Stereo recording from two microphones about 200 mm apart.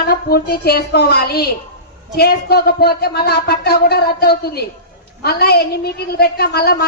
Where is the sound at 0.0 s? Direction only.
50° left (ahead or behind).